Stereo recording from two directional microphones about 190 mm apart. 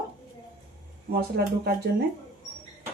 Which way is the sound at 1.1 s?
55° right (ahead or behind).